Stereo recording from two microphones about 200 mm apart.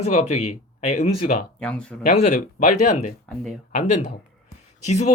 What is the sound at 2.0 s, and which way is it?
Speech, 35° left (ahead or behind).